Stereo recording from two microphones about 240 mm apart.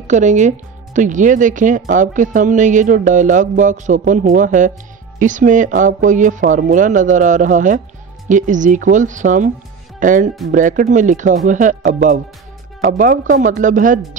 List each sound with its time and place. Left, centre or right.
0.1 s speech: right